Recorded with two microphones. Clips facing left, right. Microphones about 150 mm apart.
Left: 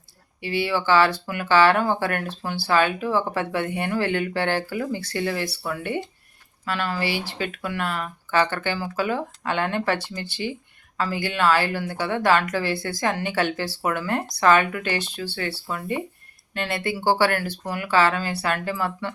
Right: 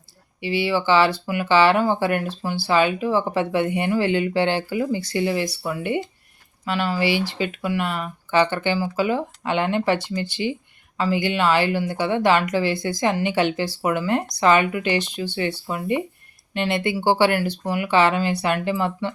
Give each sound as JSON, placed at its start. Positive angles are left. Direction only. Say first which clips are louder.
{"t": 0.4, "sound": "speech", "louder": "right 2 dB", "side_deg": -15}